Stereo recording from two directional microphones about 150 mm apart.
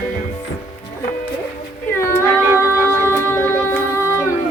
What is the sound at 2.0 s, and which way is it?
Female singing, 15° left (ahead or behind).